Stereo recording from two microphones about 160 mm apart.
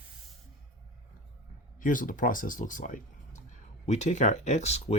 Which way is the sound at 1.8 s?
55° left (ahead or behind).